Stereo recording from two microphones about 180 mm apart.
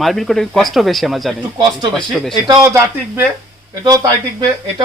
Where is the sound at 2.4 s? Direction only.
20° right (ahead or behind).